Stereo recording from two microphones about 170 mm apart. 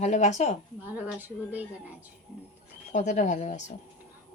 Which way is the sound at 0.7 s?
10° right (ahead or behind).